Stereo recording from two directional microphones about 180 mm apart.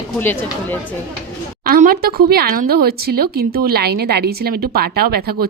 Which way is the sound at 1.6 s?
55° right (ahead or behind).